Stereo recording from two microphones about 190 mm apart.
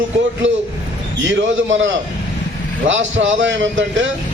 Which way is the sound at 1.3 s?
75° right (ahead or behind).